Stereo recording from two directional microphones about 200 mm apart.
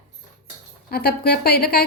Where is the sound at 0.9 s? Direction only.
50° left (ahead or behind).